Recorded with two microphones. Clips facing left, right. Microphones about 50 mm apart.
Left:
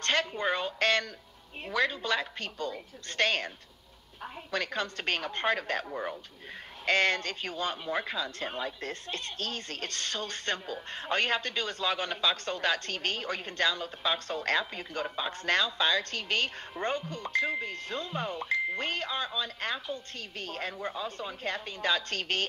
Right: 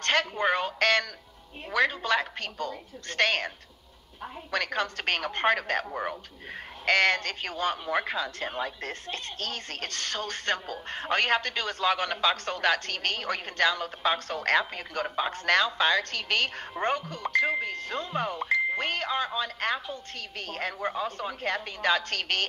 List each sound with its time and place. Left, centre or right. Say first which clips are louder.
0.0 s a woman's voice: right 3 dB; right
5.9 s a sound: right 3 dB; right
6.9 s a woman's voice: right 3 dB; right